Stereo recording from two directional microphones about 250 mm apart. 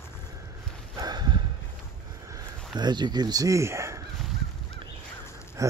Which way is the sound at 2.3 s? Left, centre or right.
Centre.